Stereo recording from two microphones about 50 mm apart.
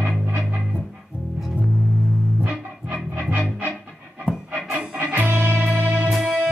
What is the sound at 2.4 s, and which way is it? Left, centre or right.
Music, right.